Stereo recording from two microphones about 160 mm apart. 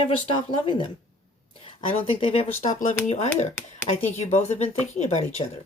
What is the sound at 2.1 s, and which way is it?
Speech, 35° left (ahead or behind).